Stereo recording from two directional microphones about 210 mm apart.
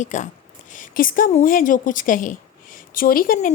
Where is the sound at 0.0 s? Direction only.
35° left (ahead or behind).